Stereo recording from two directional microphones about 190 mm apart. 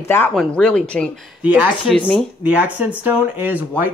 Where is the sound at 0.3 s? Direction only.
5° left (ahead or behind).